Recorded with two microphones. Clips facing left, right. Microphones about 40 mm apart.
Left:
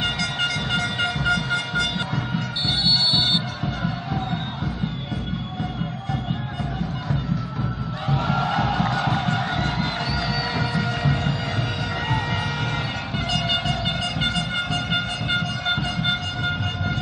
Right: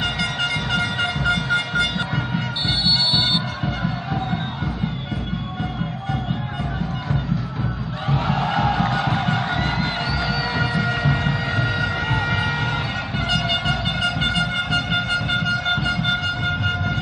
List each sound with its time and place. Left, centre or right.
0.7 s vehicle: centre
1.3 s a sound: centre
2.9 s music: centre
8.3 s music: centre
13.8 s a sound: centre
15.2 s wind instrument: centre